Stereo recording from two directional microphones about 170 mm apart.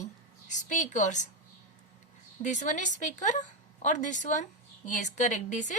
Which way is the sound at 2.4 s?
45° left (ahead or behind).